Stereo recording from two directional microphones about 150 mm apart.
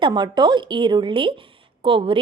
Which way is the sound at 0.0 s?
30° right (ahead or behind).